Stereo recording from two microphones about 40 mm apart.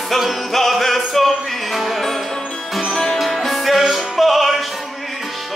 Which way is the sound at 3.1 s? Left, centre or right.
Centre.